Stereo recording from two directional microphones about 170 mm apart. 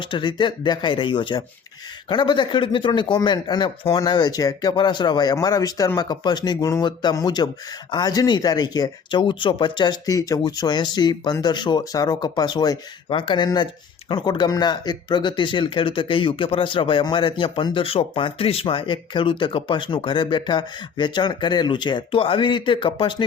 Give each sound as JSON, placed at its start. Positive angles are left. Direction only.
{"t": 0.0, "sound": "speech", "side_deg": 30}